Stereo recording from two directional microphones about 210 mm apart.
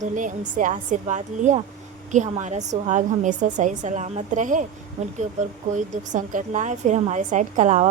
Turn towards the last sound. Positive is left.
turn(degrees=-35)  # may be behind; listen again after turning